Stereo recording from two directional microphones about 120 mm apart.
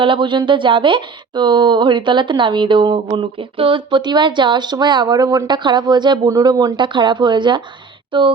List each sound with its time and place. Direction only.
0.0 s speech: 45° right (ahead or behind)